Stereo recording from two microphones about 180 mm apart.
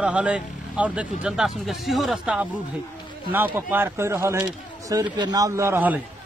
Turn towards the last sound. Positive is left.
turn(degrees=-10)  # may be behind; listen again after turning